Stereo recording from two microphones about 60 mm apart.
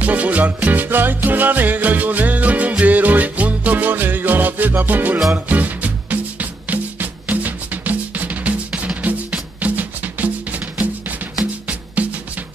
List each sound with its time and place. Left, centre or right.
0.0 s music: right
11.6 s music: right